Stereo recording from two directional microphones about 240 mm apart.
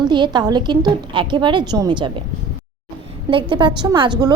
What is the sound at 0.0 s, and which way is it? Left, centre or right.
A woman's voice, centre.